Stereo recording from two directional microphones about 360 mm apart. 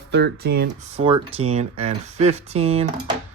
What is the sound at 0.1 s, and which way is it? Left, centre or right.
Speech, right.